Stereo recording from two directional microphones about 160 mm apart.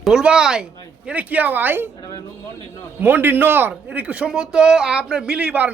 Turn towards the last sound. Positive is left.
turn(degrees=-10)  # may be behind; listen again after turning